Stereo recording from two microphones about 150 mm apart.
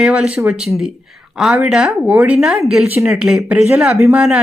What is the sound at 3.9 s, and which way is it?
Speech, 20° right (ahead or behind).